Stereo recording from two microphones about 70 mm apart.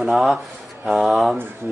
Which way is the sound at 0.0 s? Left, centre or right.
Centre.